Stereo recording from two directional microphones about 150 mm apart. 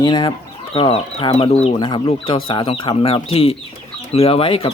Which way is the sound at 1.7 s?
30° left (ahead or behind).